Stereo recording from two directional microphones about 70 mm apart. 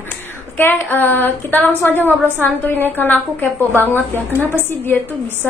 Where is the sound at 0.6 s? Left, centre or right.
Left.